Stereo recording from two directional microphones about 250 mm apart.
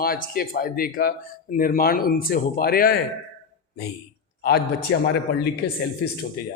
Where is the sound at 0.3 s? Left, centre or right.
Left.